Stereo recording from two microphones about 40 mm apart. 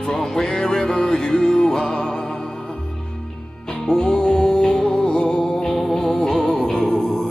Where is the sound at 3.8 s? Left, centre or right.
Centre.